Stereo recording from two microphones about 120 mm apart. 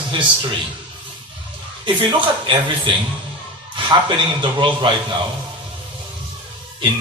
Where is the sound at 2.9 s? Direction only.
45° right (ahead or behind).